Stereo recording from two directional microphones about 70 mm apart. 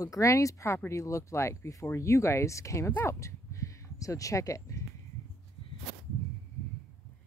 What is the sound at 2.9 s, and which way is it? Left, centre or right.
Speech, left.